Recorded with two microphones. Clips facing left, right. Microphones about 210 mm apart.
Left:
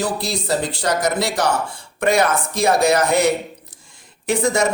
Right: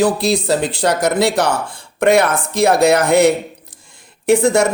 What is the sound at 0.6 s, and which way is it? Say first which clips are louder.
Speech: right 4 dB; 55° right (ahead or behind).